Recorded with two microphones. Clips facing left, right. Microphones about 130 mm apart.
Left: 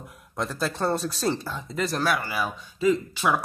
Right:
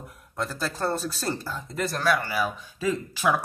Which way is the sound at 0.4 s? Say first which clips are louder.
Left 2 dB; centre (ahead or behind).